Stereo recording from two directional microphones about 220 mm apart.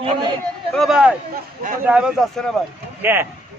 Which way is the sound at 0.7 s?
Centre (ahead or behind).